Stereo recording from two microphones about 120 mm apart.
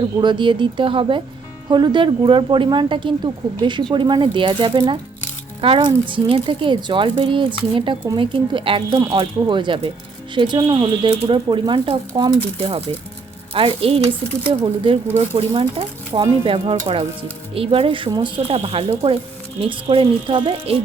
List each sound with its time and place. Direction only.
0.2 s speech: 40° right (ahead or behind)
15.0 s speech: 15° right (ahead or behind)
15.4 s speech: 50° right (ahead or behind)
18.4 s speech: 55° right (ahead or behind)